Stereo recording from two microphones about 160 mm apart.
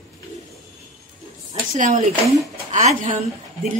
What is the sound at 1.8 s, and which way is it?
Speech, 50° right (ahead or behind).